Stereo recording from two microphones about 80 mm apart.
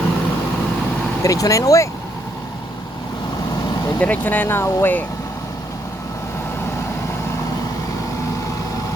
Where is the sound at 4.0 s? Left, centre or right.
Left.